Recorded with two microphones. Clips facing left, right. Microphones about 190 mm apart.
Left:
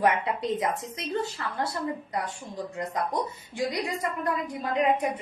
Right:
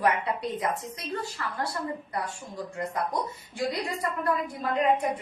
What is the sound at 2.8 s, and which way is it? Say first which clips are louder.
A woman's voice: left 1 dB; 20° left (ahead or behind).